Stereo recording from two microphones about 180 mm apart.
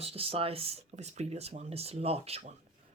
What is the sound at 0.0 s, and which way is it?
Speech, 35° right (ahead or behind).